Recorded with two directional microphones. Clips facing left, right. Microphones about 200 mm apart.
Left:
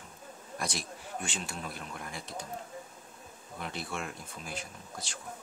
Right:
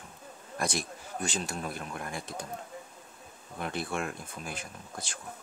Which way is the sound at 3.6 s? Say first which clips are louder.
Right 5 dB; 55° right (ahead or behind).